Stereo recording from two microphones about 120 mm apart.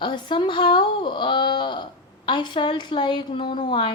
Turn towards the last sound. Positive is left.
turn(degrees=40)  # may be behind; listen again after turning